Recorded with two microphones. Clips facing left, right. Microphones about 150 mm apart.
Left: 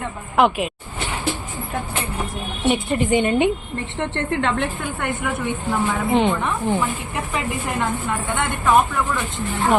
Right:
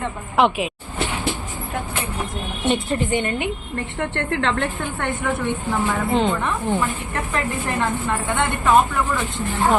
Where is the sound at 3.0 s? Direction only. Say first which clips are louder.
Left 5 dB; 20° left (ahead or behind); by 8.8 s centre (ahead or behind).